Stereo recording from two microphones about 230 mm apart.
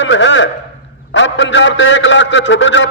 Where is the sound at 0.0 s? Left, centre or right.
Left.